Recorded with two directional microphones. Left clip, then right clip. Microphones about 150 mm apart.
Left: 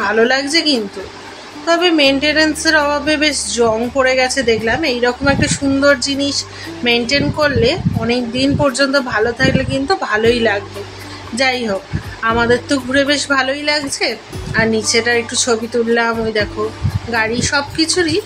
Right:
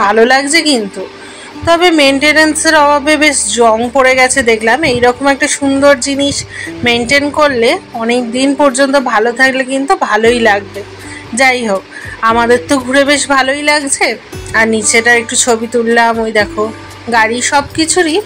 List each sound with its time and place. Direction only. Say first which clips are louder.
0.0 s music: right 6 dB; 25° right (ahead or behind)